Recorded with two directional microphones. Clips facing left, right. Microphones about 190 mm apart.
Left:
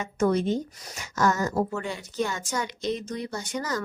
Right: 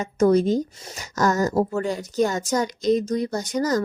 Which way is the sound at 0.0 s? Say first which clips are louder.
Right 6 dB; 40° right (ahead or behind).